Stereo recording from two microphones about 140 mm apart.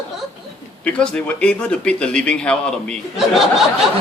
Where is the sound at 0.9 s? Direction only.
5° left (ahead or behind).